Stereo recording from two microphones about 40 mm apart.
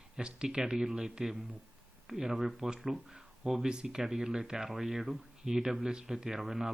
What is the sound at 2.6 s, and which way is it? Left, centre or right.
Speech, centre.